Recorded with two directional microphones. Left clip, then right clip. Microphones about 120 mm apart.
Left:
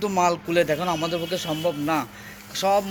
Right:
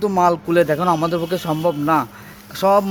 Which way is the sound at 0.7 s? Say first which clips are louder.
Right 7 dB; 90° right.